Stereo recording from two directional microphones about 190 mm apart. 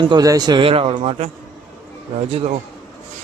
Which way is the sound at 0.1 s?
20° right (ahead or behind).